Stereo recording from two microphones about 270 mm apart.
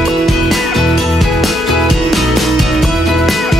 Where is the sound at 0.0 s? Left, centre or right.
Centre.